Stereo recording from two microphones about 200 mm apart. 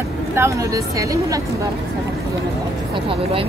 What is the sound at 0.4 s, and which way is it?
A woman's voice, 15° right (ahead or behind).